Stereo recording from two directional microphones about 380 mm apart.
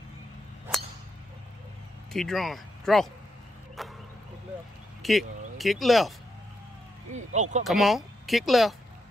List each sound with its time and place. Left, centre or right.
2.1 s speech: centre
3.8 s a sound: centre
5.0 s speech: centre
7.3 s speech: centre
7.6 s speech: centre